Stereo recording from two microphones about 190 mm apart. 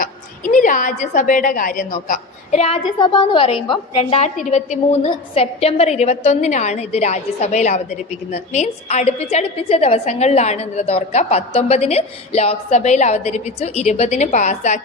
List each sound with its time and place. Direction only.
0.0 s a woman's voice: 45° left (ahead or behind)
3.0 s a woman's voice: 25° left (ahead or behind)